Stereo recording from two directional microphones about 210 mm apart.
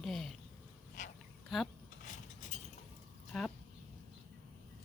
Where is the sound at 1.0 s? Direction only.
35° left (ahead or behind).